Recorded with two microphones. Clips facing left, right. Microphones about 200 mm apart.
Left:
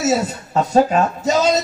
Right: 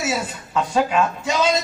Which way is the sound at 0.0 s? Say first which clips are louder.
Left 6 dB; 40° left (ahead or behind).